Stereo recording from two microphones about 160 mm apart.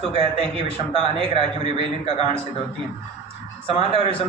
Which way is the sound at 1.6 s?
40° left (ahead or behind).